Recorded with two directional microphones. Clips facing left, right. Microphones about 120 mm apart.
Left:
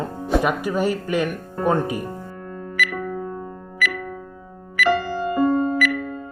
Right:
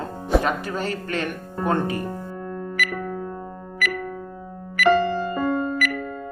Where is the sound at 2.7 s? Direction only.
45° right (ahead or behind).